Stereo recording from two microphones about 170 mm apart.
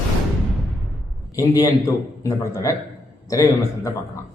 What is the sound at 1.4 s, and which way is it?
A man's voice, 20° left (ahead or behind).